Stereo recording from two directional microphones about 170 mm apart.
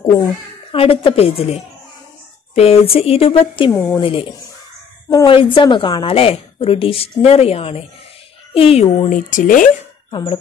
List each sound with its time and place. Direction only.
0.7 s a woman's voice: 35° left (ahead or behind)
3.7 s speech: 15° left (ahead or behind)
4.0 s a woman's voice: 30° left (ahead or behind)
9.1 s speech: 50° left (ahead or behind)